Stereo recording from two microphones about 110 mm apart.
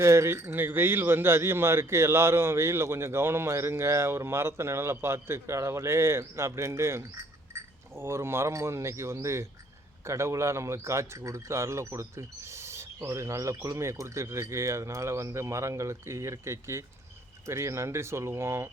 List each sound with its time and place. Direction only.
0.0 s speech: 25° right (ahead or behind)